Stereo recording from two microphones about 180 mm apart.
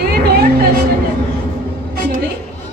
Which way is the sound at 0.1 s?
60° right (ahead or behind).